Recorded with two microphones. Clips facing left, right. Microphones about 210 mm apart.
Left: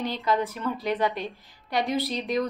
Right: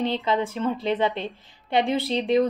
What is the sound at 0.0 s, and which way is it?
A woman's voice, 25° right (ahead or behind).